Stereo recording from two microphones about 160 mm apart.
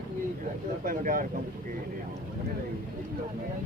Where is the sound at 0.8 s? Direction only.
60° right (ahead or behind).